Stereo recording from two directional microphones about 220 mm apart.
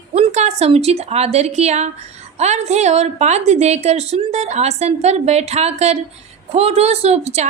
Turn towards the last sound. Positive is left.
turn(degrees=-30)  # may be behind; listen again after turning